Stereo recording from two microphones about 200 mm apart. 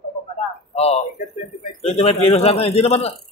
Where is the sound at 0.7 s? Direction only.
30° left (ahead or behind).